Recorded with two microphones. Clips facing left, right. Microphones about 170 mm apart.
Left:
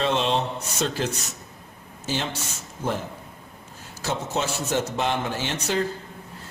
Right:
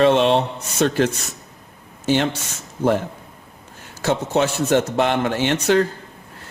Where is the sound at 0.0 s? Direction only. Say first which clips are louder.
Right 8 dB; 60° right (ahead or behind).